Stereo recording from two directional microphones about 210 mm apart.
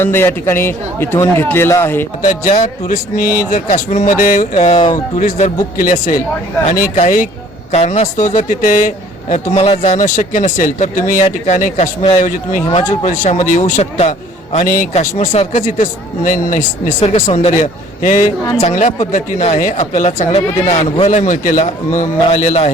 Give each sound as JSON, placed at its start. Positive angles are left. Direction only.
{"t": 0.0, "sound": "a man's voice", "side_deg": 10}
{"t": 2.4, "sound": "a man's voice", "side_deg": 35}